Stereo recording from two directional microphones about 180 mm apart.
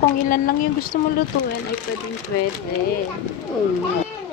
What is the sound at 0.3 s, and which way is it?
Speech, 50° left (ahead or behind).